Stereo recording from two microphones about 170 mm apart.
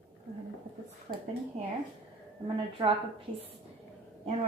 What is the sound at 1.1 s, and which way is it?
Speech, 50° right (ahead or behind).